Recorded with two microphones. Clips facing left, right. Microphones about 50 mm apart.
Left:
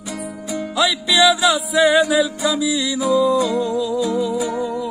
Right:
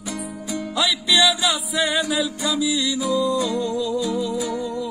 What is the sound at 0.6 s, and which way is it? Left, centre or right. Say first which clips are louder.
Music: left 4 dB; centre.